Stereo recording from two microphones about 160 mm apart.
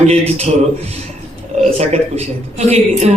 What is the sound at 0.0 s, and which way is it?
A woman's voice, 40° right (ahead or behind).